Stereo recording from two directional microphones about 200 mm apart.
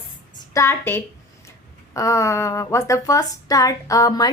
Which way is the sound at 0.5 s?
15° left (ahead or behind).